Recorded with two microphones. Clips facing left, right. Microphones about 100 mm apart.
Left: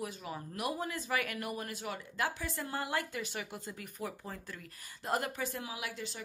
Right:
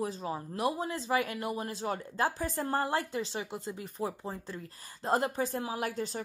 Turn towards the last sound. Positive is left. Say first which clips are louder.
# right 8 dB
turn(degrees=-40)  # may be behind; listen again after turning